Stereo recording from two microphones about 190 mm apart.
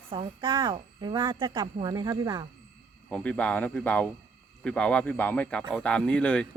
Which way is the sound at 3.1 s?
5° left (ahead or behind).